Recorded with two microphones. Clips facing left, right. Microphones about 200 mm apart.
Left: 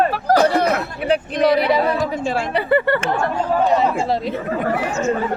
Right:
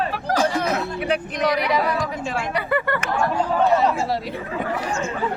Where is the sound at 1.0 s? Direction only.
30° left (ahead or behind).